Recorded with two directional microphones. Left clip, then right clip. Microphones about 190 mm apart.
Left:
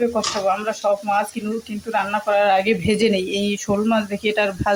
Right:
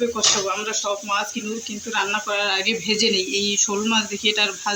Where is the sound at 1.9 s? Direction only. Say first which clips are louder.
Left 4 dB; 45° left (ahead or behind).